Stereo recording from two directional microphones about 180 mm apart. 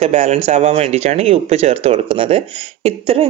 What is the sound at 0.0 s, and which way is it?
Speech, 35° right (ahead or behind).